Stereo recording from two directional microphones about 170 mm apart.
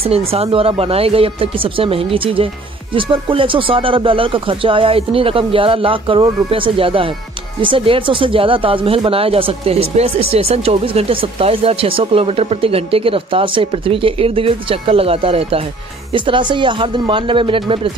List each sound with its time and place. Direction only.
0.0 s speech: 35° right (ahead or behind)